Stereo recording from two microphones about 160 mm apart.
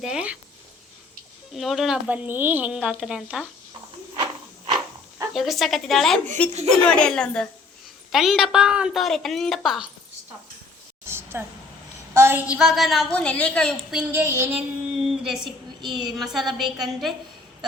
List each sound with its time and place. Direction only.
0.0 s speech: 5° right (ahead or behind)
1.5 s speech: centre (ahead or behind)
5.3 s speech: centre (ahead or behind)
6.5 s speech: 40° right (ahead or behind)
6.8 s speech: 5° left (ahead or behind)
11.0 s a sound: 15° right (ahead or behind)
12.1 s speech: 15° right (ahead or behind); by 14.0 s 5° left (ahead or behind)
14.1 s child singing: 15° right (ahead or behind)
15.0 s a sound: centre (ahead or behind)
15.8 s a woman's voice: 30° right (ahead or behind)
16.1 s speech: centre (ahead or behind)